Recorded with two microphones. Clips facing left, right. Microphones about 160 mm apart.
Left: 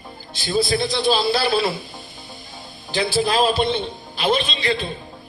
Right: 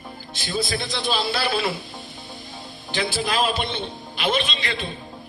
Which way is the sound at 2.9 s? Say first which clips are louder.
Left 5 dB; 35° left (ahead or behind).